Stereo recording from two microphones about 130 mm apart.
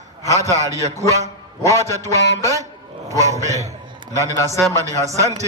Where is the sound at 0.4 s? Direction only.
25° right (ahead or behind).